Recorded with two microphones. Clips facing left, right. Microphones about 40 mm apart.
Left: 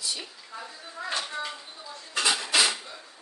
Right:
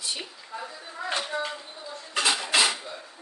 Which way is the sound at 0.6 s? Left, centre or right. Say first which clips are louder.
Right 2 dB; centre.